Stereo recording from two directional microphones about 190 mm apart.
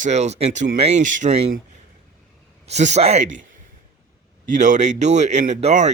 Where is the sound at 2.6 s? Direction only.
35° right (ahead or behind).